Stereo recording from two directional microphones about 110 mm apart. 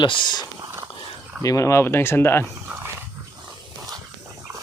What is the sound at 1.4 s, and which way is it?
Speech, 30° left (ahead or behind).